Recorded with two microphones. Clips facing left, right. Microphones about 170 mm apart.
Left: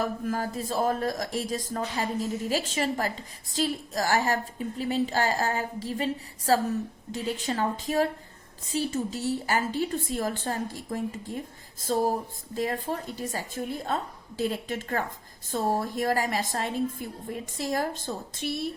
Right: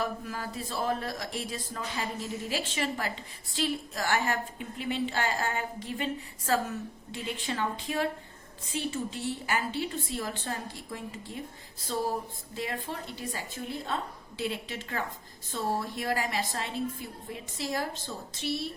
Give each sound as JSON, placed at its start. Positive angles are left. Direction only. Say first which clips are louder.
{"t": 0.0, "sound": "a woman's voice", "louder": "left 5 dB", "side_deg": 45}